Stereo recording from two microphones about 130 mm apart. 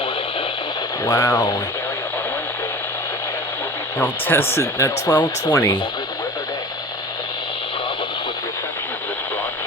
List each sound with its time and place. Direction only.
1.0 s speech: 25° left (ahead or behind)
3.9 s speech: 15° left (ahead or behind)